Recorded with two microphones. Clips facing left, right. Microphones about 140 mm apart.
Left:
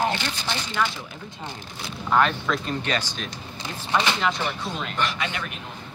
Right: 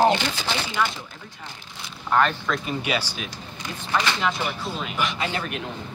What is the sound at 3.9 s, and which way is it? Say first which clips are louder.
Speech: left 1 dB; 20° left (ahead or behind).